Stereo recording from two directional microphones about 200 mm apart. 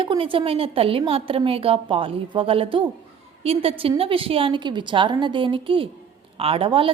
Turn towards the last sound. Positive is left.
turn(degrees=-25)  # may be behind; listen again after turning